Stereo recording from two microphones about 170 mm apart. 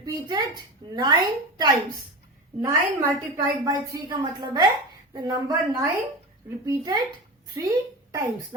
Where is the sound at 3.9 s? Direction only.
25° right (ahead or behind).